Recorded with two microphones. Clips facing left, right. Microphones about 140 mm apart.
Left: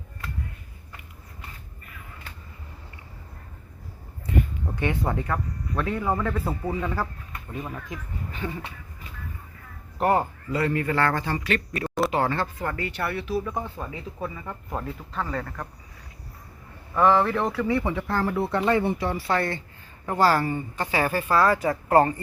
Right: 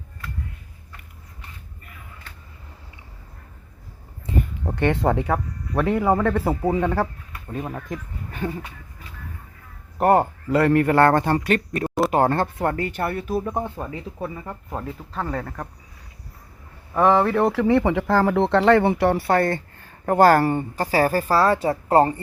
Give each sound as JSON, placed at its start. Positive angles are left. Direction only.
{"t": 4.3, "sound": "a sound", "side_deg": -25}
{"t": 4.7, "sound": "speech", "side_deg": -70}
{"t": 7.5, "sound": "speech", "side_deg": -50}
{"t": 7.9, "sound": "a sound", "side_deg": -50}
{"t": 10.0, "sound": "a man's voice", "side_deg": -60}
{"t": 14.2, "sound": "a woman's voice", "side_deg": -30}
{"t": 17.0, "sound": "a woman's voice", "side_deg": -35}
{"t": 17.4, "sound": "speech", "side_deg": -90}
{"t": 19.4, "sound": "speech", "side_deg": -45}
{"t": 20.7, "sound": "a woman's voice", "side_deg": -40}